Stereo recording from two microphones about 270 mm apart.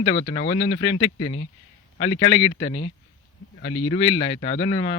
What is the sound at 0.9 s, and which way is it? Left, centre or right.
Speech, left.